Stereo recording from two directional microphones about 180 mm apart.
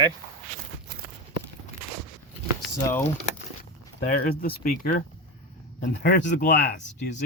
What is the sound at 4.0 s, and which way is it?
Speech, 55° left (ahead or behind).